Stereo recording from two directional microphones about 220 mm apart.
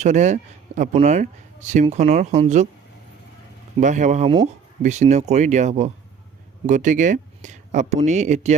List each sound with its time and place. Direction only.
0.0 s speech: 30° right (ahead or behind)
3.8 s speech: 35° right (ahead or behind)